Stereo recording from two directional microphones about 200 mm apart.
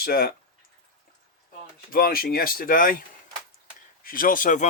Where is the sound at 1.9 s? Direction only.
45° left (ahead or behind).